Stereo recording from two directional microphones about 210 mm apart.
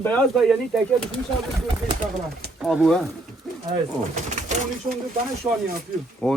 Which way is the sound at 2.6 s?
Centre (ahead or behind).